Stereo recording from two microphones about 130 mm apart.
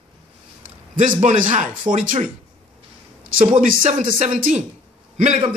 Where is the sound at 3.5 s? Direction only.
90° right.